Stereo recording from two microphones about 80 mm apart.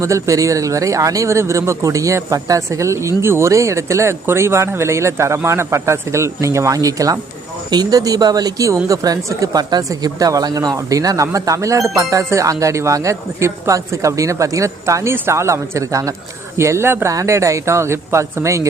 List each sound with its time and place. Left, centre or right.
0.0 s speech: right